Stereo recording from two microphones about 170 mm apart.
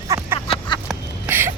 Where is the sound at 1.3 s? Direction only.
15° right (ahead or behind).